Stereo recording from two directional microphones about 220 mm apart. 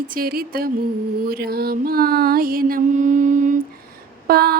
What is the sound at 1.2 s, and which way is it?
Mantra, 45° right (ahead or behind).